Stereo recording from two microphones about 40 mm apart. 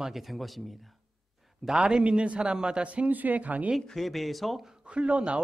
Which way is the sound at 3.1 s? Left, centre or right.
Right.